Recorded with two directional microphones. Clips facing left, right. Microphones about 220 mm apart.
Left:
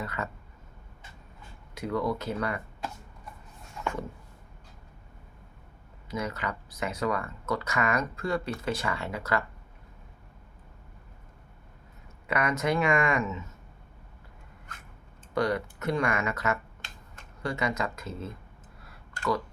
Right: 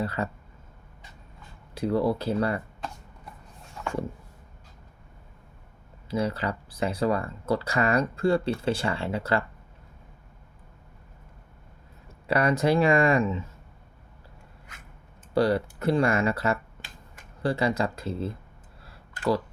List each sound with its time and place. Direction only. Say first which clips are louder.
0.0 s speech: right 6 dB; 30° right (ahead or behind)
1.7 s speech: right 5 dB; 30° right (ahead or behind)
6.1 s speech: right 6 dB; 30° right (ahead or behind)
12.3 s speech: right 5 dB; 35° right (ahead or behind)
15.4 s speech: right 5 dB; 30° right (ahead or behind)
16.8 s finger snapping: right 2 dB; 30° right (ahead or behind)
17.4 s speech: right 5 dB; 35° right (ahead or behind)